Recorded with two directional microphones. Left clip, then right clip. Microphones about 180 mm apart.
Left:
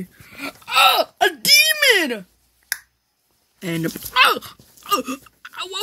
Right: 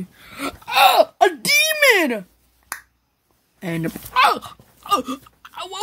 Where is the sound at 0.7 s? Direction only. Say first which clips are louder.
Right 2 dB; 5° right (ahead or behind).